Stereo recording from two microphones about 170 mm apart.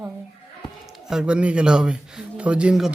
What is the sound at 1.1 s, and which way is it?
Speech, 5° right (ahead or behind).